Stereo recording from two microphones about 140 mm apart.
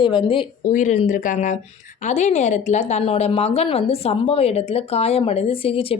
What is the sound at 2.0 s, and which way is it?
A woman's voice, 55° left (ahead or behind).